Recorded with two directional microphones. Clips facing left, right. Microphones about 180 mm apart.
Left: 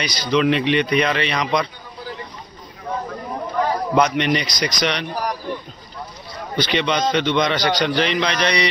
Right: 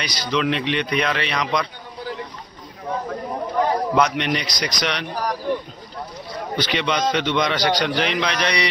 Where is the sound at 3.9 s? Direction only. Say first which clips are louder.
Left 2 dB; centre (ahead or behind).